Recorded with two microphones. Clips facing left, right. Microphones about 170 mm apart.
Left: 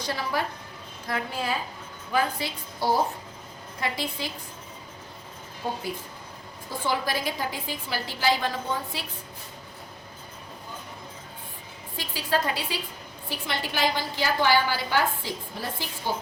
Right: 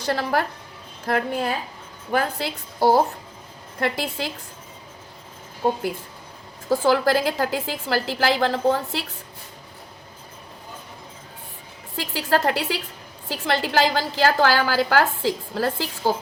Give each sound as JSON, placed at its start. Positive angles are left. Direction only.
{"t": 0.1, "sound": "a woman's voice", "side_deg": -75}
{"t": 1.0, "sound": "a woman's voice", "side_deg": -60}
{"t": 3.8, "sound": "a woman's voice", "side_deg": -75}
{"t": 6.7, "sound": "a woman's voice", "side_deg": -90}
{"t": 11.9, "sound": "a woman's voice", "side_deg": -75}
{"t": 13.2, "sound": "a woman's voice", "side_deg": -90}